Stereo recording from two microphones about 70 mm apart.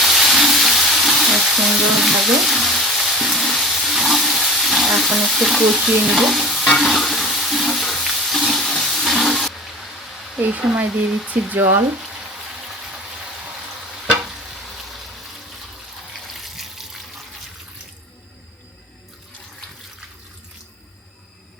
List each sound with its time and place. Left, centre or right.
0.0 s frying: centre
1.8 s speech: centre
2.2 s frying: centre
4.9 s stir: centre
10.4 s speech: right
11.3 s speech: right
16.1 s water: centre